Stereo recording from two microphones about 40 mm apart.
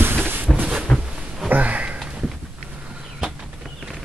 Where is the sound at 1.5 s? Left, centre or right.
Right.